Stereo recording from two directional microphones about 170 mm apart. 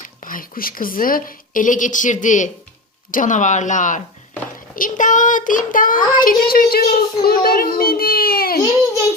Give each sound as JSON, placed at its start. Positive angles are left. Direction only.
{"t": 0.0, "sound": "a woman's voice", "side_deg": 50}